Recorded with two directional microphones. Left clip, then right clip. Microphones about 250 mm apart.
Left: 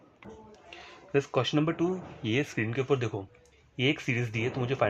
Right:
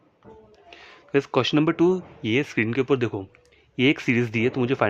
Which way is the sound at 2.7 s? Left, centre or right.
Right.